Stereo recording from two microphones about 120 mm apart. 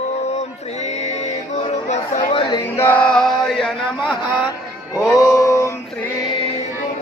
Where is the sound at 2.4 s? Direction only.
40° left (ahead or behind).